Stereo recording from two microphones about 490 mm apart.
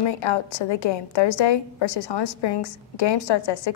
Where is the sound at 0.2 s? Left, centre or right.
Left.